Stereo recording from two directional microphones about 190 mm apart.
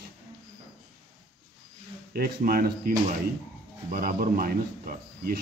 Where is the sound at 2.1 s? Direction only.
50° right (ahead or behind).